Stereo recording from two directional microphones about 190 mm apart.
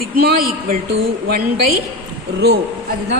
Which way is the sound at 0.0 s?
55° right (ahead or behind).